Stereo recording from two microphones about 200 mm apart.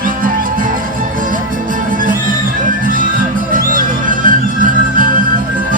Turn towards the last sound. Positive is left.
turn(degrees=-45)  # may be behind; listen again after turning